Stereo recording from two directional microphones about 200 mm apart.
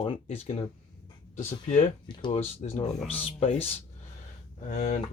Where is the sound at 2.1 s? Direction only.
30° left (ahead or behind).